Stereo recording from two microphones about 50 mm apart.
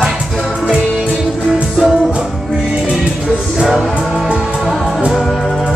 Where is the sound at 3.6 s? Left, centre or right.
Centre.